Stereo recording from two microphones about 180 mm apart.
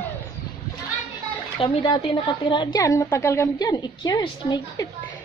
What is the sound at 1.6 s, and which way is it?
A woman's voice, 25° left (ahead or behind).